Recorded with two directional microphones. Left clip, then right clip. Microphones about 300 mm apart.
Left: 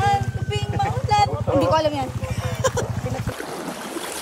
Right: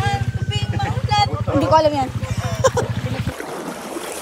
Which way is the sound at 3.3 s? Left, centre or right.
Centre.